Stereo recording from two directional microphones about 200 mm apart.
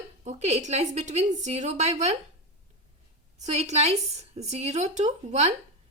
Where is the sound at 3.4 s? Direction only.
35° right (ahead or behind).